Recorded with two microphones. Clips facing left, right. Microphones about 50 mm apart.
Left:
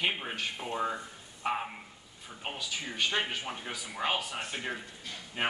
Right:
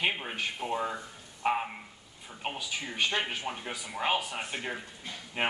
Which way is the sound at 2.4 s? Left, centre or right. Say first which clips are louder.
Right 2 dB; centre.